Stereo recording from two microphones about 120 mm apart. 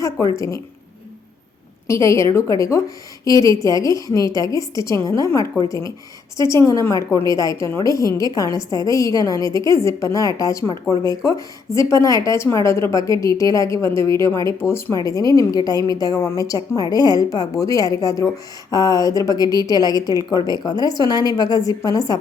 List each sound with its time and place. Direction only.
0.3 s speech: 25° left (ahead or behind)
1.9 s a woman's voice: 25° left (ahead or behind)